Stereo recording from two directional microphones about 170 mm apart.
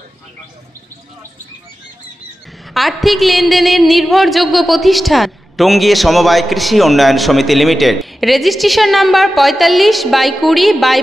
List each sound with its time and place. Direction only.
2.7 s a woman's voice: centre (ahead or behind)